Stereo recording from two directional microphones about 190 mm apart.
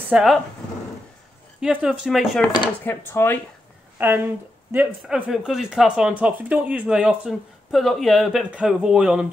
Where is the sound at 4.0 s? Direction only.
10° right (ahead or behind).